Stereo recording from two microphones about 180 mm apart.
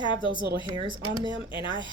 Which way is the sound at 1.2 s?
25° left (ahead or behind).